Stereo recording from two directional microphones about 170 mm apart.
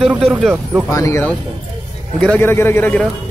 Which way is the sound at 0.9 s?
15° left (ahead or behind).